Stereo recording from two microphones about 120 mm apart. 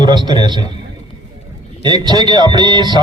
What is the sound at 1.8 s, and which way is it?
A man's voice, 35° right (ahead or behind).